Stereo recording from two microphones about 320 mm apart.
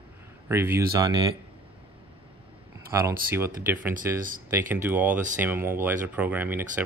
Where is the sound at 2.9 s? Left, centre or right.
Centre.